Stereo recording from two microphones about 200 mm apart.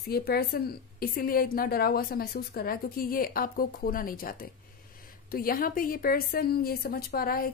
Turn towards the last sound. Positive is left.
turn(degrees=50)  # may be behind; listen again after turning